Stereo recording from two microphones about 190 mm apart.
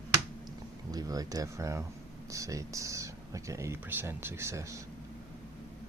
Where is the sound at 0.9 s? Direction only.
20° right (ahead or behind).